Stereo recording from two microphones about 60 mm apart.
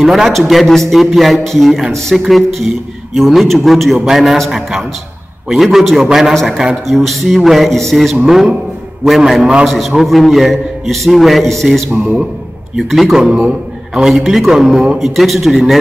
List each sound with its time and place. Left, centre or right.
0.0 s a man's voice: centre
12.0 s a man's voice: centre
12.7 s a man's voice: centre
13.4 s a sound: centre
14.0 s a man's voice: centre